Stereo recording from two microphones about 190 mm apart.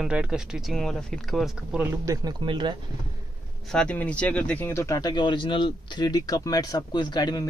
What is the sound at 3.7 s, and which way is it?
Speech, 5° left (ahead or behind).